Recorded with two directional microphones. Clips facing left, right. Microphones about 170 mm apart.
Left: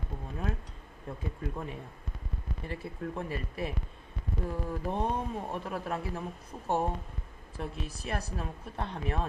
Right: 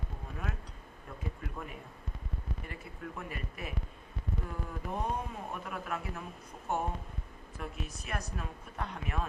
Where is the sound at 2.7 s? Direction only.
30° left (ahead or behind).